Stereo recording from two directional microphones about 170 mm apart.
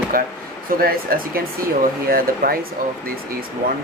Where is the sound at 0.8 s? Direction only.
60° right (ahead or behind).